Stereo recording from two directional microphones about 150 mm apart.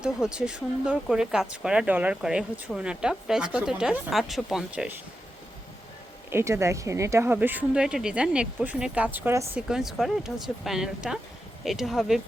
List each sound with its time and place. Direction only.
0.0 s speech: 5° right (ahead or behind)
6.3 s speech: 20° right (ahead or behind)
9.6 s speech: 5° right (ahead or behind)